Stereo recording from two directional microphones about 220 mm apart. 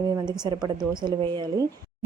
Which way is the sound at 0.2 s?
20° right (ahead or behind).